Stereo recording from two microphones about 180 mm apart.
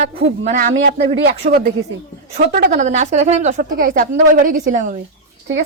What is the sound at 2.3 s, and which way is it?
A woman's voice, 50° right (ahead or behind).